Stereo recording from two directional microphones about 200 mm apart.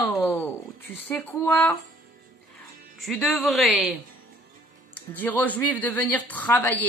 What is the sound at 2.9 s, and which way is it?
Speech, centre (ahead or behind).